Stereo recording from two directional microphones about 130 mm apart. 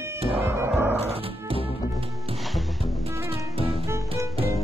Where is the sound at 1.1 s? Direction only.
45° right (ahead or behind).